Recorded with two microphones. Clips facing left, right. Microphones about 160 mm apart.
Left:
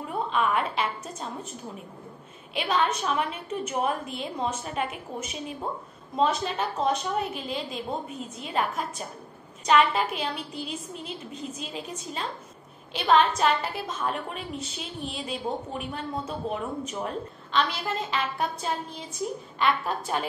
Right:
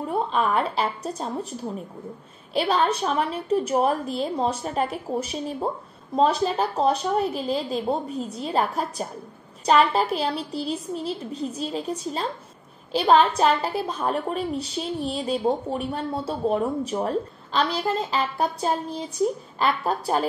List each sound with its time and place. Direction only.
0.1 s a woman's voice: 35° right (ahead or behind)